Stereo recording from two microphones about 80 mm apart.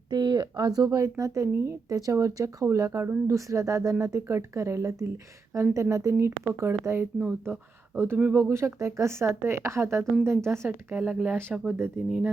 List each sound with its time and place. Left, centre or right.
0.1 s speech: right
0.9 s speech: right
3.0 s speech: right
3.3 s speech: right
10.7 s a woman's voice: centre